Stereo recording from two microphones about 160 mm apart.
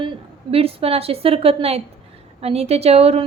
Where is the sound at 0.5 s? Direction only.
35° right (ahead or behind).